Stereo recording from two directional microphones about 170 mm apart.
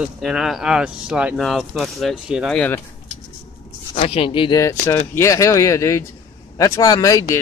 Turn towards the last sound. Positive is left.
turn(degrees=20)  # may be behind; listen again after turning